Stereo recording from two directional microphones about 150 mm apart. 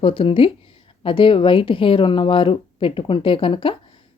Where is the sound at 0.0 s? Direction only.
35° left (ahead or behind).